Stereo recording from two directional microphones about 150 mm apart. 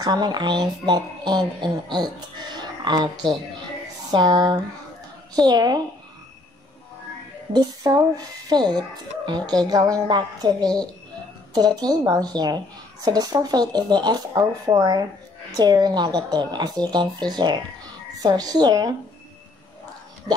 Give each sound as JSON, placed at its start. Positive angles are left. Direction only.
{"t": 0.0, "sound": "a woman's voice", "side_deg": -30}
{"t": 7.5, "sound": "a woman's voice", "side_deg": -25}